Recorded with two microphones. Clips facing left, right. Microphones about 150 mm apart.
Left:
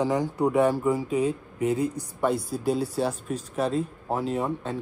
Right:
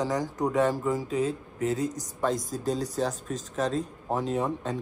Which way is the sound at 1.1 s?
40° right (ahead or behind).